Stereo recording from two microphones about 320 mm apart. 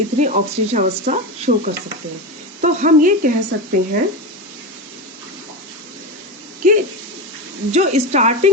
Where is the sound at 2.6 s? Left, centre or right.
Right.